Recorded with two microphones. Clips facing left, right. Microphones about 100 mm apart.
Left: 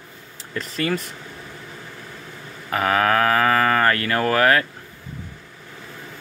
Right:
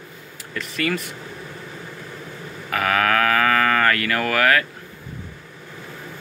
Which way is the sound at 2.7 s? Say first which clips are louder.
Left 1 dB; 30° left (ahead or behind).